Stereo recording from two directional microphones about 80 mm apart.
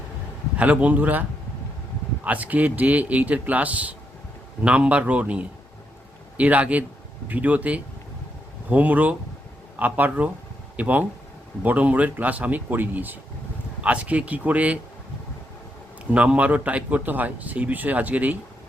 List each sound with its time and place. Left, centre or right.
0.5 s speech: centre
2.2 s speech: centre
16.0 s speech: centre